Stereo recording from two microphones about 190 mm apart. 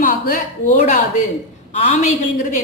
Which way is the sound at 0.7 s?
40° left (ahead or behind).